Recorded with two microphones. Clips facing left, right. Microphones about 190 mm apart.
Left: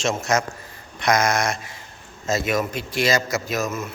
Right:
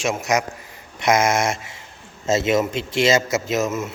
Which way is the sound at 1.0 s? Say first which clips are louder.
Right 2 dB; 25° right (ahead or behind).